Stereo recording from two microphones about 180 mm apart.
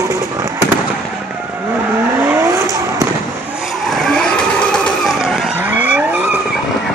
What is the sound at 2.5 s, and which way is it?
Vehicle, 15° right (ahead or behind).